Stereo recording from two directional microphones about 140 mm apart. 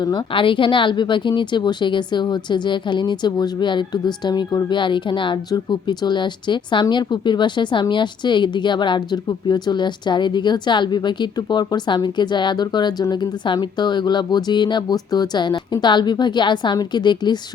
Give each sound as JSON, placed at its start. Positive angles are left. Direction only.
{"t": 0.0, "sound": "a woman's voice", "side_deg": 35}